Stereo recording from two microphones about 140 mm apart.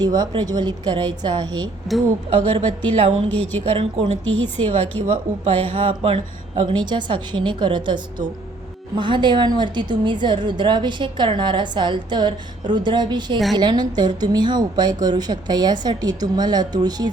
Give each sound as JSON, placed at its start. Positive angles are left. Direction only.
{"t": 0.0, "sound": "a woman's voice", "side_deg": -30}
{"t": 1.9, "sound": "speech", "side_deg": 0}
{"t": 2.3, "sound": "a woman's voice", "side_deg": -45}